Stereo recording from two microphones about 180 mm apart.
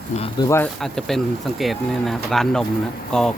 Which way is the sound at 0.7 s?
Centre (ahead or behind).